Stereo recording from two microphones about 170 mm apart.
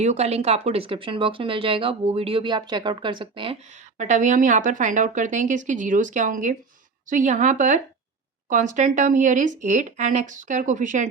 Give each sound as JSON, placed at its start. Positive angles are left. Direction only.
{"t": 0.0, "sound": "speech", "side_deg": -40}
{"t": 3.9, "sound": "speech", "side_deg": -45}